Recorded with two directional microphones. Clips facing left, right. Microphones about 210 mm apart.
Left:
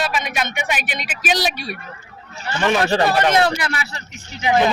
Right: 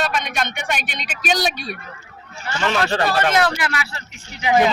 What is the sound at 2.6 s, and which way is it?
A man's voice, 15° left (ahead or behind).